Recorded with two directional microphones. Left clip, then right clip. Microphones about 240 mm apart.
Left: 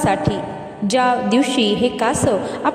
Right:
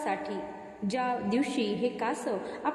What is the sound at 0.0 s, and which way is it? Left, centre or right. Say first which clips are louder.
A woman's voice: left 14 dB; left.